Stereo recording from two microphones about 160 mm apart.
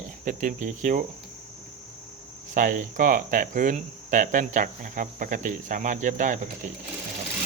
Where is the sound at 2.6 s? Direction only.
60° right (ahead or behind).